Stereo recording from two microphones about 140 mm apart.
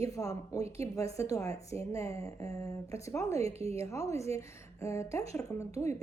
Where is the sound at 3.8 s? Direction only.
25° left (ahead or behind).